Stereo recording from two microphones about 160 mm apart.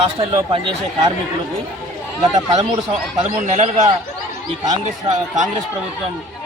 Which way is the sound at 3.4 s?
50° right (ahead or behind).